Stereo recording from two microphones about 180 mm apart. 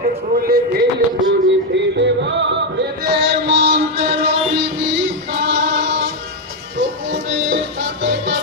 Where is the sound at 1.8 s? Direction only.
75° right (ahead or behind).